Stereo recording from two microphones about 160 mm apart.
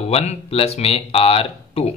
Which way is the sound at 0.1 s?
40° left (ahead or behind).